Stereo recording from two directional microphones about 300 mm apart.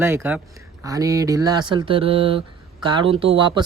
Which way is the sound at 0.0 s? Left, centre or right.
Centre.